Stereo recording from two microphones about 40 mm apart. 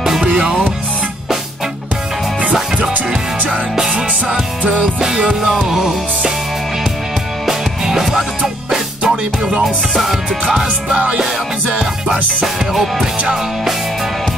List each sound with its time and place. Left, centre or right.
0.2 s music: right
3.1 s music: centre
3.9 s music: right
5.0 s music: centre
7.4 s music: centre
12.7 s music: centre